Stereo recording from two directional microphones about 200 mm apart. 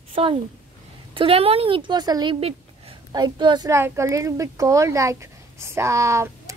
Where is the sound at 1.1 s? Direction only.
30° right (ahead or behind).